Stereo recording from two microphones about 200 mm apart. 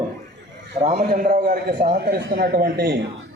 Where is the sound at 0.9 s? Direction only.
50° right (ahead or behind).